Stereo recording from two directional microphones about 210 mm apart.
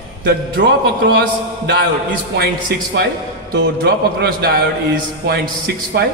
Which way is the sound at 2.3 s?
50° right (ahead or behind).